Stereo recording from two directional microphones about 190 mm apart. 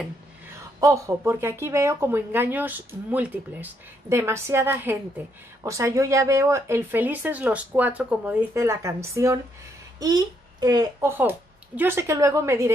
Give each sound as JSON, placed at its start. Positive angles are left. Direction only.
{"t": 0.7, "sound": "a child's voice", "side_deg": -20}